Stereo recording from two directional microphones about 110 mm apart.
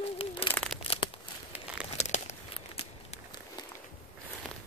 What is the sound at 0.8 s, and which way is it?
Crumpling, 60° left (ahead or behind).